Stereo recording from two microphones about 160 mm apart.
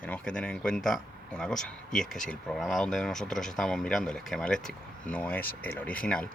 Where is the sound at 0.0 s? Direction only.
10° left (ahead or behind).